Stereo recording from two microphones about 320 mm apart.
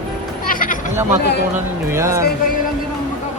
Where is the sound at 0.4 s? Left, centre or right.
Left.